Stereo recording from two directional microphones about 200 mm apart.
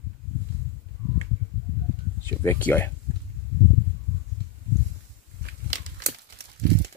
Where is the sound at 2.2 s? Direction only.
10° left (ahead or behind).